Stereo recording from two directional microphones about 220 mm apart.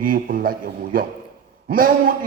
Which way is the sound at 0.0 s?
40° right (ahead or behind).